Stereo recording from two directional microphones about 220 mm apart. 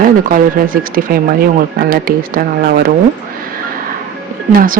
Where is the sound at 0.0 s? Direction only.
40° right (ahead or behind).